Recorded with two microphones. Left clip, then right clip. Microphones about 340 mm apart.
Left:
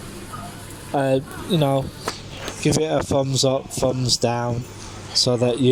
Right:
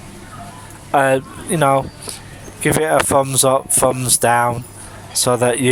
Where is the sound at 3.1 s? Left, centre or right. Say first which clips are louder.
Right 5 dB; right.